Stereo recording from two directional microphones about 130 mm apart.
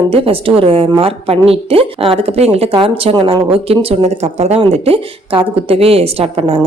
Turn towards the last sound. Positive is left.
turn(degrees=-45)  # may be behind; listen again after turning